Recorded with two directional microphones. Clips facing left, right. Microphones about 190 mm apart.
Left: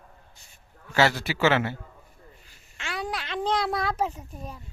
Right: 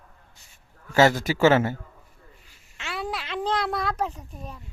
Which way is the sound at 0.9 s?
45° right (ahead or behind).